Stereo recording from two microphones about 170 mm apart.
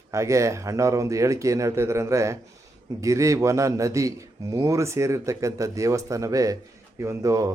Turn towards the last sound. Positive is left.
turn(degrees=-20)  # may be behind; listen again after turning